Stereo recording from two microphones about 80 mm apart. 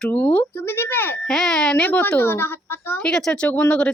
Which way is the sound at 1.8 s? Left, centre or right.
Left.